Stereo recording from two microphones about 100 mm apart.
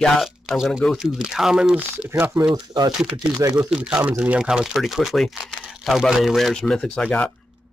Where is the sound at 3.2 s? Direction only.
35° right (ahead or behind).